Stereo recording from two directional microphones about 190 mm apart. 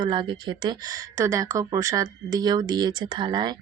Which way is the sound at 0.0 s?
25° right (ahead or behind).